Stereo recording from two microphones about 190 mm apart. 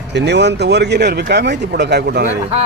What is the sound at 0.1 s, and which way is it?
Speech, 65° right (ahead or behind).